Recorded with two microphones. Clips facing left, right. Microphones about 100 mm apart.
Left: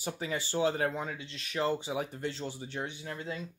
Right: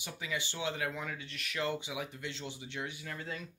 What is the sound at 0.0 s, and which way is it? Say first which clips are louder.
Speech: left 4 dB; 40° left (ahead or behind).